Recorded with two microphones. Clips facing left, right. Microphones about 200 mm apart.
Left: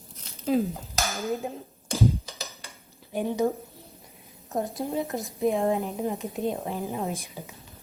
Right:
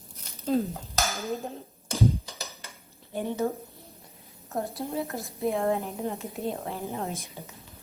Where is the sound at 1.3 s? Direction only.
15° left (ahead or behind).